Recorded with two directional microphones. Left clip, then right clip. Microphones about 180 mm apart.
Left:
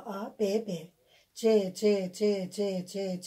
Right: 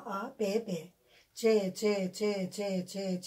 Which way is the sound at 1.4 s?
40° left (ahead or behind).